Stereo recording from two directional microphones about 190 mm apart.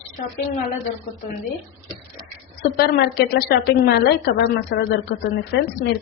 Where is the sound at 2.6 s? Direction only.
55° left (ahead or behind).